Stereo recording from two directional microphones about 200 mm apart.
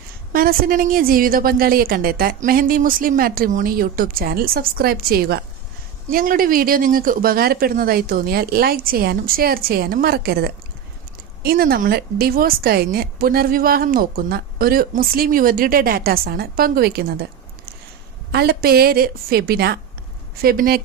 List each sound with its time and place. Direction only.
0.3 s a woman's voice: 45° right (ahead or behind)
18.3 s a woman's voice: 50° right (ahead or behind)